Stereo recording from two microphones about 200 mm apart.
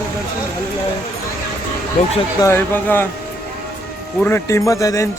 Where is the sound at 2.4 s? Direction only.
10° left (ahead or behind).